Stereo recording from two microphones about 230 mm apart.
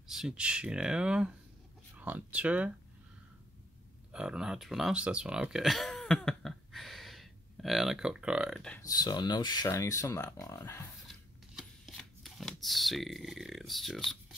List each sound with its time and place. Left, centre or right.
0.1 s speech: centre
4.1 s speech: centre
8.8 s speech: centre
11.5 s shuffling cards: centre